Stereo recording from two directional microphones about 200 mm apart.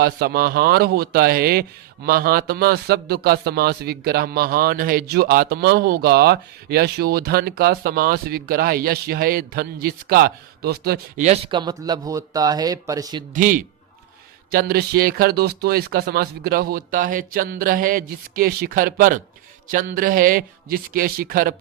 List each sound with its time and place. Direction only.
0.0 s a man's voice: 50° right (ahead or behind)
11.2 s speech: 30° right (ahead or behind)
13.3 s a man's voice: 40° right (ahead or behind)